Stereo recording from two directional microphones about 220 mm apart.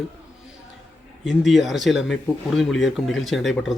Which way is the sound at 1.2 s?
Centre (ahead or behind).